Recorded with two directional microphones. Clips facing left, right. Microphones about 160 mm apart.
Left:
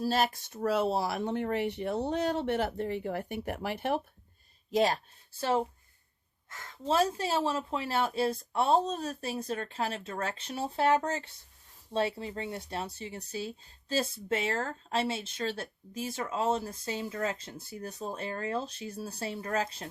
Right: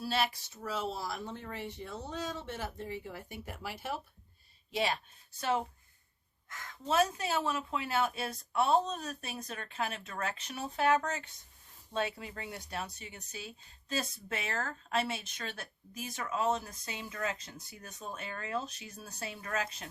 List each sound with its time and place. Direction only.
0.0 s speech: 40° left (ahead or behind); by 4.0 s 60° left (ahead or behind)
4.7 s speech: 40° left (ahead or behind)